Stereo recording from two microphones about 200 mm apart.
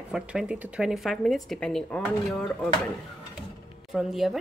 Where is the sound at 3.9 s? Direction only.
Centre (ahead or behind).